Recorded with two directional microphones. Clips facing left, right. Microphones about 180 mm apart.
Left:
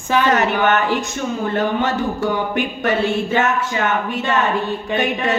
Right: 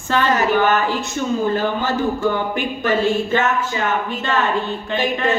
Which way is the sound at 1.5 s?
70° left (ahead or behind).